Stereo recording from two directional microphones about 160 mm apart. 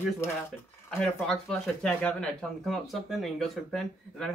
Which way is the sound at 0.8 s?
5° left (ahead or behind).